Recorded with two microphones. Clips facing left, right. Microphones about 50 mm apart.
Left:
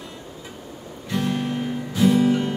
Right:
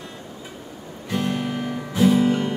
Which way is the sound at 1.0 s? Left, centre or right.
Right.